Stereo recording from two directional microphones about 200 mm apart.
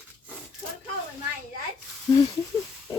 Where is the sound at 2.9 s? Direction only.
20° left (ahead or behind).